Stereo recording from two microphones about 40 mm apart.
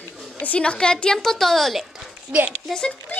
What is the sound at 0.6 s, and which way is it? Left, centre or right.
A woman's voice, left.